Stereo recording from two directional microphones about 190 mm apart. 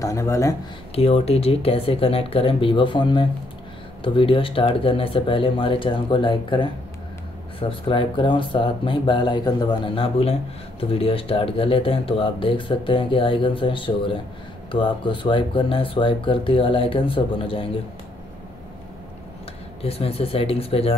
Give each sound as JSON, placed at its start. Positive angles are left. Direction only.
{"t": 0.0, "sound": "speech", "side_deg": 15}
{"t": 0.9, "sound": "speech", "side_deg": 30}
{"t": 7.9, "sound": "speech", "side_deg": 25}
{"t": 19.8, "sound": "speech", "side_deg": 30}